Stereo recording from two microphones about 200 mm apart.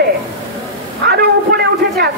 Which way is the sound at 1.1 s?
55° right (ahead or behind).